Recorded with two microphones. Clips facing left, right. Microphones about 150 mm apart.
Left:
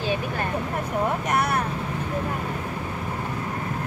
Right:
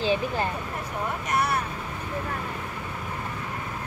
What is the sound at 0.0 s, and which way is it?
Vehicle, 25° right (ahead or behind).